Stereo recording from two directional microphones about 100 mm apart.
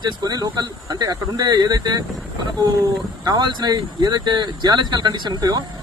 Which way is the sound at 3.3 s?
45° right (ahead or behind).